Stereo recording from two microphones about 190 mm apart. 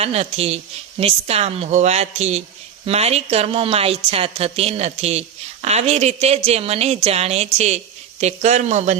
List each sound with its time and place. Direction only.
0.0 s speech: 30° right (ahead or behind)